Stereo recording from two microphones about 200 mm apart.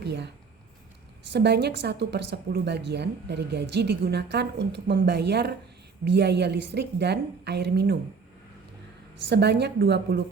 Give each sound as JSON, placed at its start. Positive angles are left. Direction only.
{"t": 0.0, "sound": "a sound", "side_deg": -60}
{"t": 1.3, "sound": "a woman's voice", "side_deg": -55}
{"t": 9.3, "sound": "a woman's voice", "side_deg": -55}